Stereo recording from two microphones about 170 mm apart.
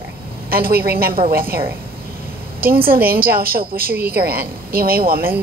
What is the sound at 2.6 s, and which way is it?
A woman's voice, 60° right (ahead or behind).